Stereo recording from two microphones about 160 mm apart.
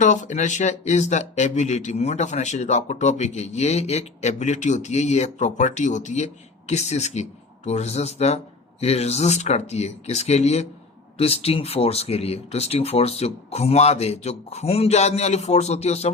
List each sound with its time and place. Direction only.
0.0 s speech: 50° left (ahead or behind)